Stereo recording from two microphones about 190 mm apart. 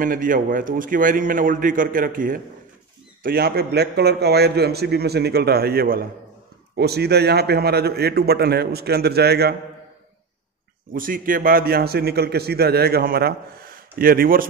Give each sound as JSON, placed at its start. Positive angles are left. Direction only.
{"t": 0.0, "sound": "a man's voice", "side_deg": -45}
{"t": 10.9, "sound": "a man's voice", "side_deg": -45}